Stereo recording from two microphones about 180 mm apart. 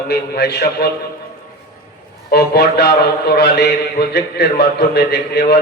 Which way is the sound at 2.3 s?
65° left (ahead or behind).